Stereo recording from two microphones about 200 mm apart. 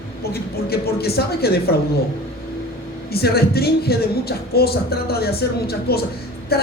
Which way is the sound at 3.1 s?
50° left (ahead or behind).